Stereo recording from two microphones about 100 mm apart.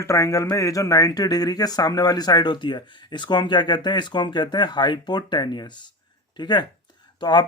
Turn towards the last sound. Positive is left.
turn(degrees=45)  # may be behind; listen again after turning